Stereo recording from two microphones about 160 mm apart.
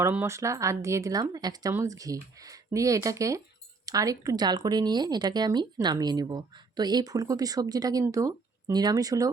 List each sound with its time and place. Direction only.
0.0 s speech: 15° right (ahead or behind)